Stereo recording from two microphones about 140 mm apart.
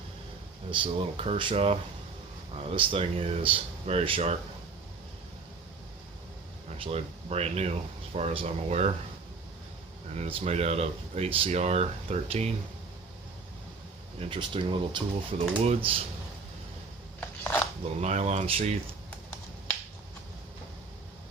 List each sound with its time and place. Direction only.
0.7 s speech: 40° right (ahead or behind)
6.7 s speech: 45° right (ahead or behind)
10.2 s speech: 45° right (ahead or behind)
14.2 s speech: 35° right (ahead or behind)
17.2 s a sound: 15° left (ahead or behind)
17.8 s speech: 50° right (ahead or behind)